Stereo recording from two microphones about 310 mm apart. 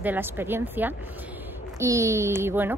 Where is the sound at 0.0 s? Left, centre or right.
Centre.